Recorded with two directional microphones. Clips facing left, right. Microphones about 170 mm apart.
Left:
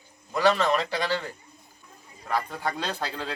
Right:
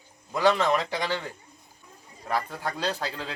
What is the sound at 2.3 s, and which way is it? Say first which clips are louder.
Speech: left 1 dB; centre (ahead or behind).